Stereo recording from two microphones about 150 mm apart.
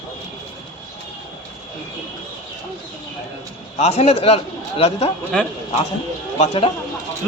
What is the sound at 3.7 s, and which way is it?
A man's voice, 45° left (ahead or behind).